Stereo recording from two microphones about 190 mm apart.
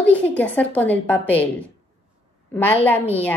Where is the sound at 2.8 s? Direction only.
10° left (ahead or behind).